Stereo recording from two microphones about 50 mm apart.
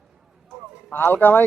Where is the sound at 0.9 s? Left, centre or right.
Left.